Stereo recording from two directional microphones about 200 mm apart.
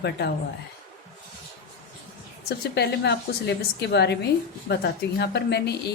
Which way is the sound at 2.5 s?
55° left (ahead or behind).